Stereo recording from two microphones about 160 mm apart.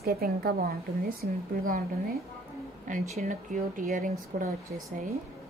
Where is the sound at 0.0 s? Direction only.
70° right (ahead or behind).